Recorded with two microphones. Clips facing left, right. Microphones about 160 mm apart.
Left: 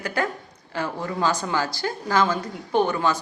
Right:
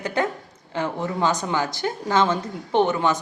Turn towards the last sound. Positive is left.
turn(degrees=-20)  # may be behind; listen again after turning